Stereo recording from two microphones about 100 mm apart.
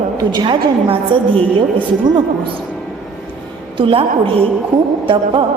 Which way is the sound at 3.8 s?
65° right (ahead or behind).